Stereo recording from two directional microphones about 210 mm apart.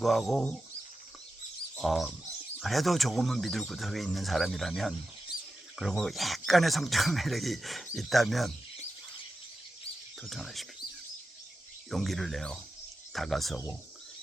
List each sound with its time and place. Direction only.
0.0 s speech: centre (ahead or behind)
1.7 s speech: centre (ahead or behind)
10.2 s speech: centre (ahead or behind)
11.9 s speech: centre (ahead or behind)